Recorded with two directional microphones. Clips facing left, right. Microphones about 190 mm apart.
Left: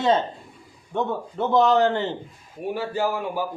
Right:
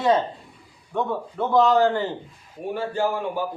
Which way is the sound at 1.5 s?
20° left (ahead or behind).